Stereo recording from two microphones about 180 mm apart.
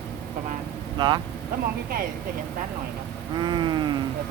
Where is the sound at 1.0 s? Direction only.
25° right (ahead or behind).